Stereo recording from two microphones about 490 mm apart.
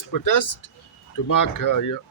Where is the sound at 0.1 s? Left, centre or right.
Left.